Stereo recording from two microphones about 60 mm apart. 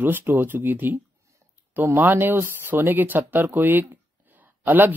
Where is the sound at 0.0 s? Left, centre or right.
Right.